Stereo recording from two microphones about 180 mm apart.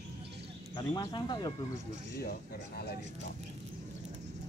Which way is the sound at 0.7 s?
25° left (ahead or behind).